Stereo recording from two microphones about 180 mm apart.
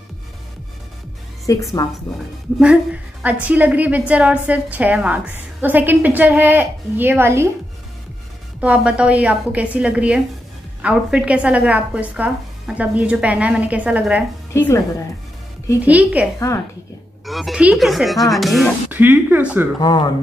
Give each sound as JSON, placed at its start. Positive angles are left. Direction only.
{"t": 1.4, "sound": "a woman's voice", "side_deg": 20}
{"t": 2.6, "sound": "a woman's voice", "side_deg": -5}
{"t": 8.5, "sound": "a woman's voice", "side_deg": -5}
{"t": 14.5, "sound": "a woman's voice", "side_deg": 15}
{"t": 15.8, "sound": "a woman's voice", "side_deg": -10}
{"t": 16.3, "sound": "a woman's voice", "side_deg": 15}
{"t": 17.3, "sound": "speech", "side_deg": 0}
{"t": 18.9, "sound": "a woman's voice", "side_deg": -10}
{"t": 19.8, "sound": "a woman's voice", "side_deg": 25}